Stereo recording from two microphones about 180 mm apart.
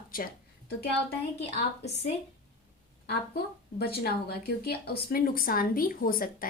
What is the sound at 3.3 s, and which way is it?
A woman's voice, 60° left (ahead or behind).